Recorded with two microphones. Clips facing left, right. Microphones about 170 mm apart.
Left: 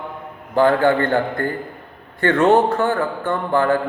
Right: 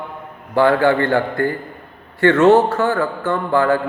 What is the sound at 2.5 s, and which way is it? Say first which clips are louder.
Speech: right 2 dB; 15° left (ahead or behind).